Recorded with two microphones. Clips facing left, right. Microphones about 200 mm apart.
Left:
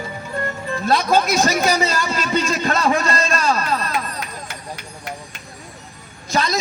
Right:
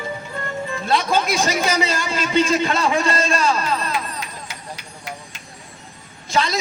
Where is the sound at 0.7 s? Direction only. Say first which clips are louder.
Left 3 dB; 40° left (ahead or behind).